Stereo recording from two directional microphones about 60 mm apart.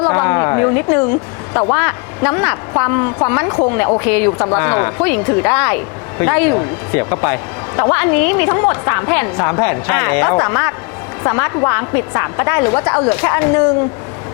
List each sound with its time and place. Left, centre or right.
0.0 s a sound: left
1.7 s speech: left
4.3 s speech: left
4.5 s speech: left
9.6 s speech: centre